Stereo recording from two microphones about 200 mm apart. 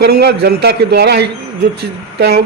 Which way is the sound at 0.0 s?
55° right (ahead or behind).